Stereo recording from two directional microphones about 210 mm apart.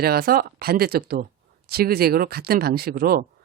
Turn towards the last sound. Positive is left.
turn(degrees=-45)  # may be behind; listen again after turning